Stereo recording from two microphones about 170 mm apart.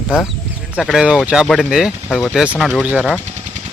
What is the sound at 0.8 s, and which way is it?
Speech, centre (ahead or behind).